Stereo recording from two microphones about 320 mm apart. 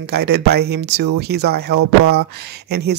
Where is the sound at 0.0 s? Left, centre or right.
Right.